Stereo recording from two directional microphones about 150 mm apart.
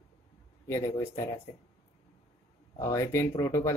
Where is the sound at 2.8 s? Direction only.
20° left (ahead or behind).